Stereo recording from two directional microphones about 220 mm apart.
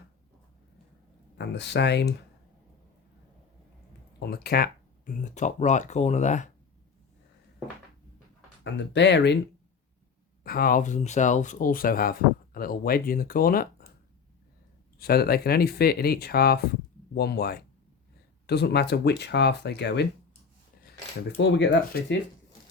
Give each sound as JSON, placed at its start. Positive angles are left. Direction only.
{"t": 1.4, "sound": "speech", "side_deg": 50}
{"t": 4.2, "sound": "speech", "side_deg": 45}
{"t": 8.6, "sound": "speech", "side_deg": 55}
{"t": 10.4, "sound": "speech", "side_deg": 40}
{"t": 14.9, "sound": "speech", "side_deg": 45}